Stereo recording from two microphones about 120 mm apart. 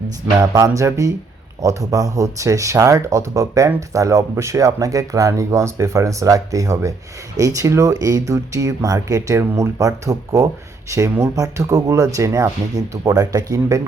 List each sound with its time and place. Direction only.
0.3 s speech: 30° right (ahead or behind)